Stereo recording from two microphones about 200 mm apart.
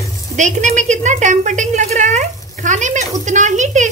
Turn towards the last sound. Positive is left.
turn(degrees=-35)  # may be behind; listen again after turning